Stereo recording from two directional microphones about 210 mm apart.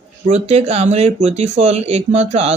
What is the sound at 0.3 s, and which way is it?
Speech, 30° right (ahead or behind).